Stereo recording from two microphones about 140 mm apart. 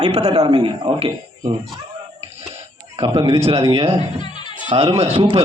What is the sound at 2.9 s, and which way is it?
A man's voice, 40° right (ahead or behind).